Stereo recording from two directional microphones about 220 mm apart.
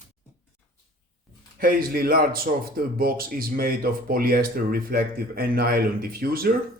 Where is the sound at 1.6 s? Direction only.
40° right (ahead or behind).